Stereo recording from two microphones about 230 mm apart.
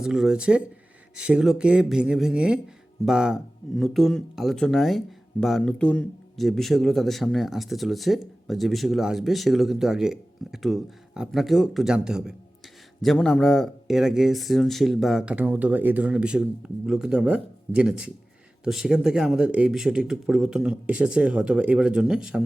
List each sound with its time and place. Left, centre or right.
0.0 s speech: centre